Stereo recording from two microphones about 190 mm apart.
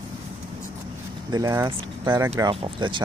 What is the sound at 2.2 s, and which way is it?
Speech, 15° right (ahead or behind).